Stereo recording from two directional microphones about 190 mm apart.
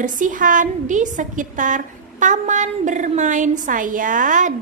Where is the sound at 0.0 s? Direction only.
45° right (ahead or behind).